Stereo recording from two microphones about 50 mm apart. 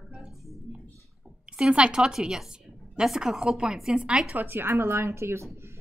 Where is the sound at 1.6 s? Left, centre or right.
Centre.